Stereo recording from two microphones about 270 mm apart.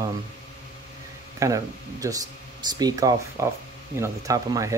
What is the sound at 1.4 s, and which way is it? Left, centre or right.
Speech, centre.